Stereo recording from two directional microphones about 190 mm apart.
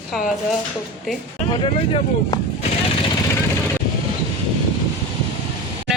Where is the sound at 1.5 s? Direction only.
30° left (ahead or behind).